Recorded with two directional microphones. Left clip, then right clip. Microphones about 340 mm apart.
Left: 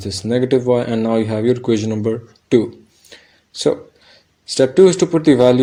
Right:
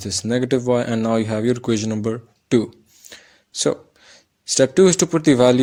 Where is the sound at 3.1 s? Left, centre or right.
Right.